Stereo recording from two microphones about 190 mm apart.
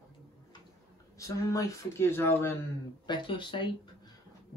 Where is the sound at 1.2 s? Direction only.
15° left (ahead or behind).